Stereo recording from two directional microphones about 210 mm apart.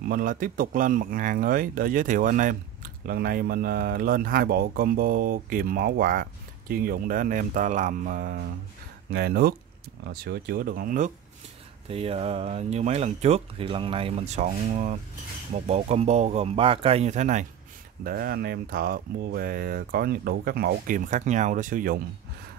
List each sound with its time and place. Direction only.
0.1 s speech: 40° right (ahead or behind)
11.9 s speech: 30° right (ahead or behind)
18.0 s speech: 45° right (ahead or behind)